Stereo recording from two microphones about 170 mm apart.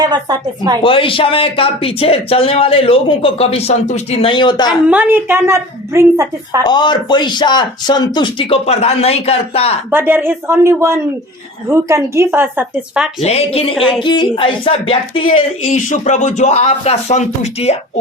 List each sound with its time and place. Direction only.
0.0 s speech: 25° right (ahead or behind)
0.8 s speech: 30° left (ahead or behind)
4.9 s a woman's voice: 10° right (ahead or behind)
6.6 s speech: 25° left (ahead or behind)
9.9 s a woman's voice: 10° right (ahead or behind)
13.2 s speech: 35° left (ahead or behind)
13.7 s speech: centre (ahead or behind)
14.0 s speech: 25° left (ahead or behind)
15.9 s speech: 45° left (ahead or behind)